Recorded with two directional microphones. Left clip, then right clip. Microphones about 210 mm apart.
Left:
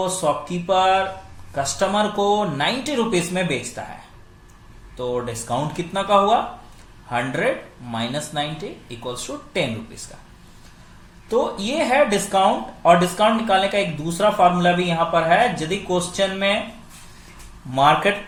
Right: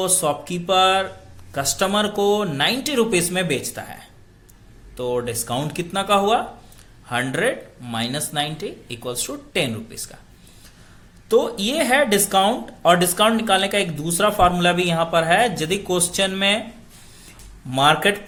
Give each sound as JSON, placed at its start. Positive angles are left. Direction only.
{"t": 0.2, "sound": "speech", "side_deg": -30}
{"t": 4.9, "sound": "speech", "side_deg": -25}
{"t": 11.3, "sound": "speech", "side_deg": -30}
{"t": 17.7, "sound": "speech", "side_deg": -30}